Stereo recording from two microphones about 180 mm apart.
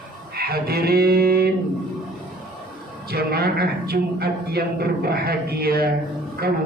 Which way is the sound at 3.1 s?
60° right (ahead or behind).